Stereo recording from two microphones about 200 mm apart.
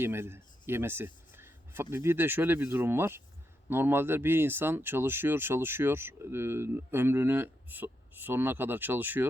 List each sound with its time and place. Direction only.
0.0 s speech: 10° right (ahead or behind)